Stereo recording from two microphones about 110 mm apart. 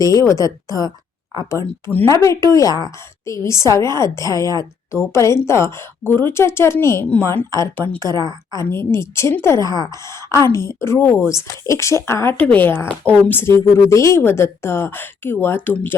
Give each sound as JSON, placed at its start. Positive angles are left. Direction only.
{"t": 0.0, "sound": "a woman's voice", "side_deg": 30}
{"t": 2.0, "sound": "speech", "side_deg": 30}
{"t": 9.6, "sound": "a woman's voice", "side_deg": 35}